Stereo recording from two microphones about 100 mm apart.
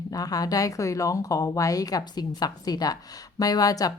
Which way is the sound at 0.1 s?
40° left (ahead or behind).